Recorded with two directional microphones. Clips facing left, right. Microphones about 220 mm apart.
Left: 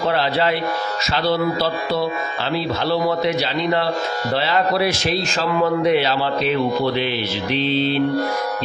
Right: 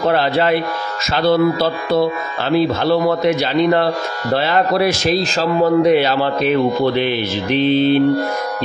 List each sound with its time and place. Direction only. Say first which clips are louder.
0.1 s a man's voice: right 4 dB; 50° right (ahead or behind)
2.8 s a man's voice: right 4 dB; 50° right (ahead or behind)